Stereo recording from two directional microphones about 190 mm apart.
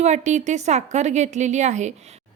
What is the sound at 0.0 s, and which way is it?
A woman's voice, 40° right (ahead or behind).